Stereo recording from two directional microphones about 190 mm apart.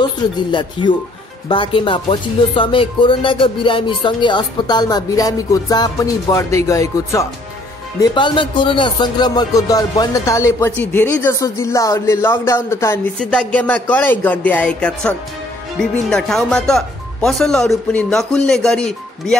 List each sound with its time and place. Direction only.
0.0 s speech: 25° left (ahead or behind); by 19.3 s 5° left (ahead or behind)